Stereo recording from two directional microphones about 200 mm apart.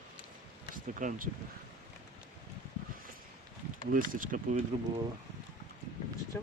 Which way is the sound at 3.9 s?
45° right (ahead or behind).